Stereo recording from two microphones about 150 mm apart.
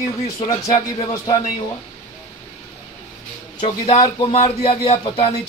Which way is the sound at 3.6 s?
45° left (ahead or behind).